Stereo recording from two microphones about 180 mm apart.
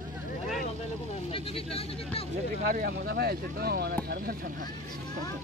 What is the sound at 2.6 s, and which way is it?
Speech, 50° right (ahead or behind).